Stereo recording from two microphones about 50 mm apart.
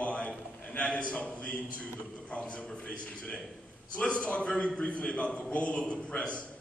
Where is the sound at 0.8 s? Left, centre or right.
Left.